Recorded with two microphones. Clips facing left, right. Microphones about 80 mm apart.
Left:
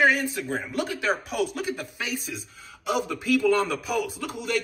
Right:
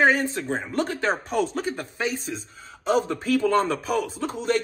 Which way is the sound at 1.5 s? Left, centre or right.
Right.